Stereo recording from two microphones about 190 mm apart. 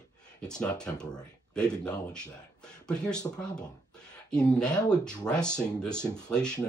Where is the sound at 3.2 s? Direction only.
15° left (ahead or behind).